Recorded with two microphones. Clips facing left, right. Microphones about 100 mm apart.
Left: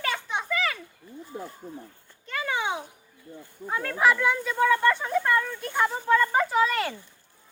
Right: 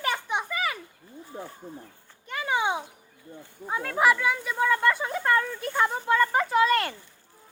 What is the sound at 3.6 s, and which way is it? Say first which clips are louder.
Speech: even; 15° right (ahead or behind).